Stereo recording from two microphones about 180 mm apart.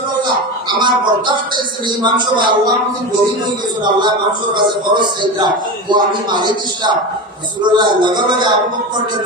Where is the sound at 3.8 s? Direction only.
25° right (ahead or behind).